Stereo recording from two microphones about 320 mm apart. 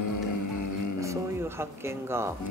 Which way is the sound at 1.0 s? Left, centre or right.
Centre.